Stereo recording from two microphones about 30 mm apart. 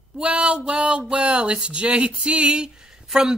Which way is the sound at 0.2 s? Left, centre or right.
Right.